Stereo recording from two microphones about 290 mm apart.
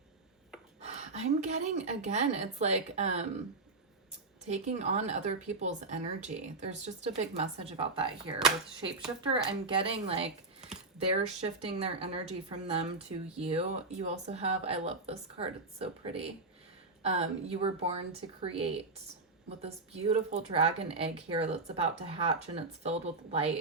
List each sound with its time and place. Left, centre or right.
0.8 s speech: right
4.4 s speech: right